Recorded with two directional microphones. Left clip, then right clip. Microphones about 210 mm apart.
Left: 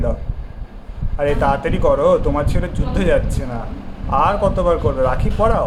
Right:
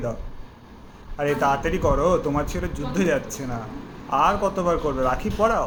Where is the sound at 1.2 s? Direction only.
5° right (ahead or behind).